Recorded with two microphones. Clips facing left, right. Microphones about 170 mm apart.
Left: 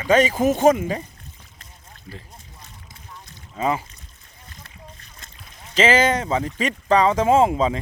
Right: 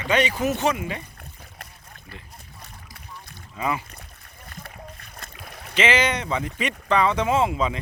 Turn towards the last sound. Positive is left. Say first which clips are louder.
# left 5 dB
turn(degrees=35)  # may be behind; listen again after turning